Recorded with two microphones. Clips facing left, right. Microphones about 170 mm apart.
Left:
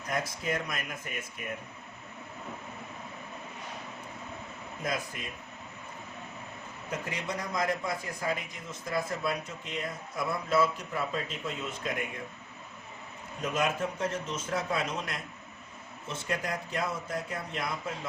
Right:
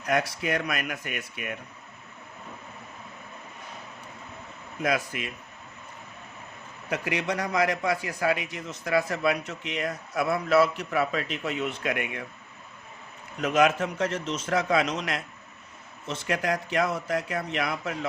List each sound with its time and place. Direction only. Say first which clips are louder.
0.0 s a man's voice: right 7 dB; 75° right (ahead or behind)
4.8 s speech: right 7 dB; 80° right
6.9 s a man's voice: right 7 dB; 75° right (ahead or behind)
13.4 s speech: right 7 dB; 80° right